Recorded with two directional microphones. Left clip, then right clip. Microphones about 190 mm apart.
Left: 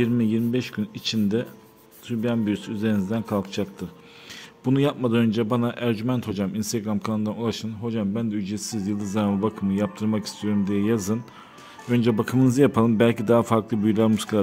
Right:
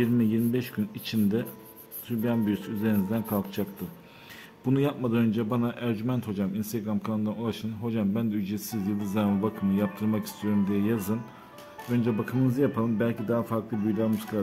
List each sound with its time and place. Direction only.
0.0 s a man's voice: 25° left (ahead or behind)
4.6 s a man's voice: 30° left (ahead or behind)
11.9 s speech: 45° left (ahead or behind)